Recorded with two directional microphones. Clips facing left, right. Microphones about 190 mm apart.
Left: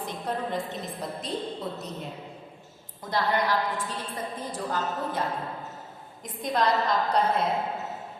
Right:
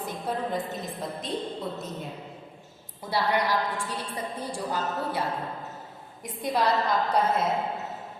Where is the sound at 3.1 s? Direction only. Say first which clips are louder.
Even; 10° right (ahead or behind).